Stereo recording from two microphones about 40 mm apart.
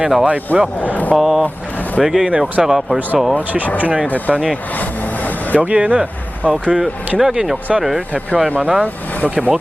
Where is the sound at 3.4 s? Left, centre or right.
Right.